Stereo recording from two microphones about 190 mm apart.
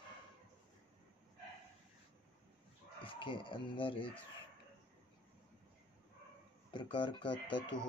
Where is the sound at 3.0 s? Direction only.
25° left (ahead or behind).